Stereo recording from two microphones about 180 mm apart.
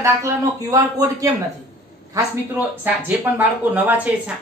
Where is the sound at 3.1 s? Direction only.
10° right (ahead or behind).